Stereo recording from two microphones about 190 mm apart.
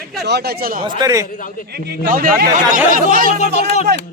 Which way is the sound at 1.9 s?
50° right (ahead or behind).